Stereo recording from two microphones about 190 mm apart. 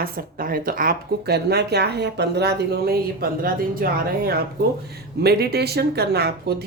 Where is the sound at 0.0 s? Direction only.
50° right (ahead or behind).